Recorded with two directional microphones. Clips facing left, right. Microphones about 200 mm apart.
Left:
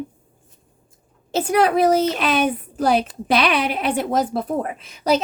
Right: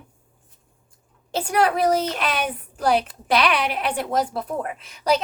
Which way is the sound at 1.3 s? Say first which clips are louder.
Left 4 dB; 20° left (ahead or behind).